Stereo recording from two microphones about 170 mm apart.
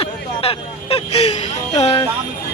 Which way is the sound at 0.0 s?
35° left (ahead or behind).